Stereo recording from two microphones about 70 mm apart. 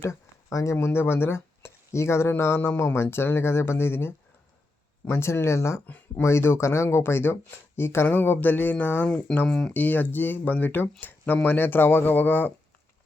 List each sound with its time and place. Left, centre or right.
0.0 s a sound: left
0.8 s speech: left
5.8 s speech: left
6.2 s speech: left
9.0 s speech: centre
9.7 s speech: left